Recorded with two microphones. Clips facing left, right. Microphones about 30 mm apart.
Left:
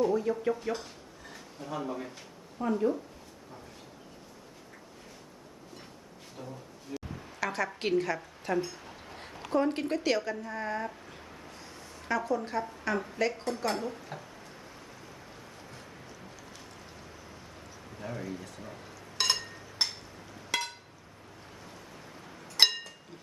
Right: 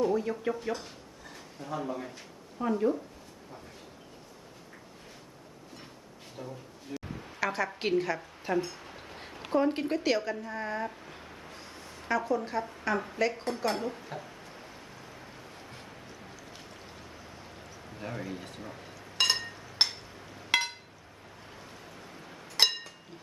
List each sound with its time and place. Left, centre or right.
0.0 s a woman's voice: centre
6.4 s a woman's voice: centre
6.9 s a sound: right
7.3 s a woman's voice: centre
17.9 s a man's voice: right
18.3 s speech: right
18.6 s chink: centre
19.8 s a sound: right